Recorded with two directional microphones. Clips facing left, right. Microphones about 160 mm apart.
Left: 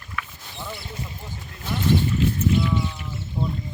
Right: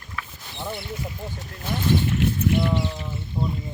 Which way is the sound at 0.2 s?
35° right (ahead or behind).